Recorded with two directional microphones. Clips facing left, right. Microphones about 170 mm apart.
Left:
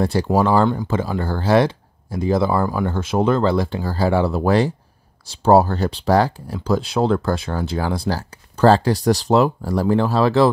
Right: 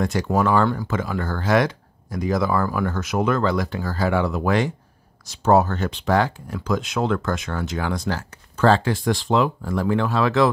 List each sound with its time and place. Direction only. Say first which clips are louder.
0.0 s speech: left 3 dB; 30° left (ahead or behind)